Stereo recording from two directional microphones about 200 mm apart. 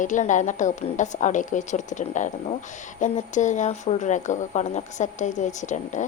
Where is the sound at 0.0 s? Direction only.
40° left (ahead or behind).